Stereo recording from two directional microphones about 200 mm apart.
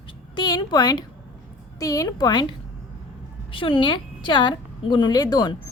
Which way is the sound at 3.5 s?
25° left (ahead or behind).